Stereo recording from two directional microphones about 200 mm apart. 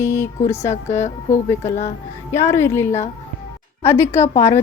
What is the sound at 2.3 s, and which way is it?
Speech, 15° left (ahead or behind).